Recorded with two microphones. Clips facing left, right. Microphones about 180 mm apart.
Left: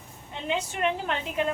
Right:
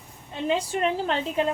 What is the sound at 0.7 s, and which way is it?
Speech, 35° right (ahead or behind).